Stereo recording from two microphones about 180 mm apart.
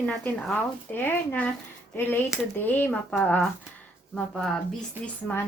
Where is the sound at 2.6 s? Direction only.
10° left (ahead or behind).